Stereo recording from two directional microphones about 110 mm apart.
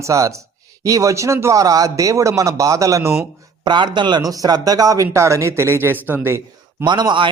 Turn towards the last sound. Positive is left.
turn(degrees=-45)  # may be behind; listen again after turning